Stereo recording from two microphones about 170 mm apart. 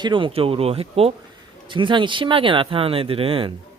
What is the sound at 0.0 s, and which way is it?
Speech, 30° right (ahead or behind).